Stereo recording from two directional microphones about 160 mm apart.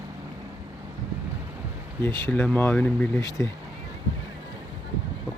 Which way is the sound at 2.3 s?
10° left (ahead or behind).